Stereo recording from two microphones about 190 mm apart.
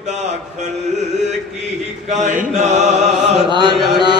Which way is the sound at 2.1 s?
40° right (ahead or behind).